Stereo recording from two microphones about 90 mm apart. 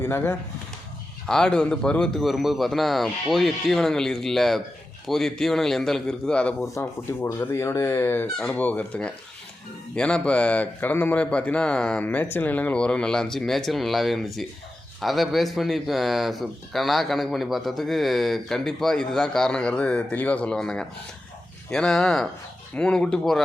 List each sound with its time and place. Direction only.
0.0 s speech: 25° left (ahead or behind)
1.3 s speech: 10° left (ahead or behind)
6.7 s a man's voice: 30° left (ahead or behind); by 12.0 s 10° left (ahead or behind)
12.0 s a man's voice: 20° left (ahead or behind); by 23.4 s 5° left (ahead or behind)